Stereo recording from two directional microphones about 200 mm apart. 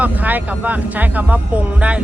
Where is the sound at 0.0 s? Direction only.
10° right (ahead or behind).